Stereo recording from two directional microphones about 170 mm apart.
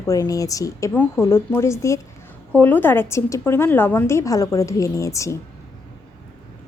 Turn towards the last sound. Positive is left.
turn(degrees=15)  # may be behind; listen again after turning